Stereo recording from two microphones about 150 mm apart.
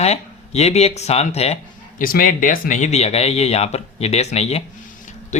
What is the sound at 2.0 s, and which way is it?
Speech, 70° left (ahead or behind).